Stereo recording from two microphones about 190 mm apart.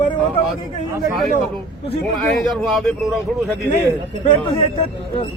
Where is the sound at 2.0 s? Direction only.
Centre (ahead or behind).